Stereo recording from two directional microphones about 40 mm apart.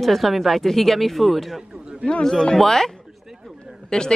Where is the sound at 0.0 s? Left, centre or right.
Centre.